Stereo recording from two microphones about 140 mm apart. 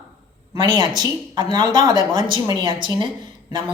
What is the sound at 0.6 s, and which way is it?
A man's voice, 30° right (ahead or behind).